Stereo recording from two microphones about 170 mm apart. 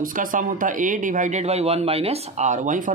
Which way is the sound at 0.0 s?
55° right (ahead or behind).